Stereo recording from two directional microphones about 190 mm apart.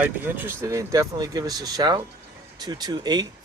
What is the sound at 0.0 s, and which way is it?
Speech, 10° right (ahead or behind).